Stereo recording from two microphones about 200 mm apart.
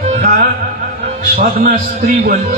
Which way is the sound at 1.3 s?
50° right (ahead or behind).